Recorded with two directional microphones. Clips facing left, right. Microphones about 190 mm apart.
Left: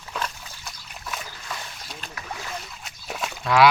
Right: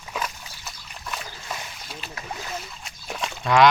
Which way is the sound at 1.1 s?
5° left (ahead or behind).